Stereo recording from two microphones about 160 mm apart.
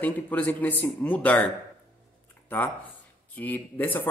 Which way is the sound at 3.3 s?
10° left (ahead or behind).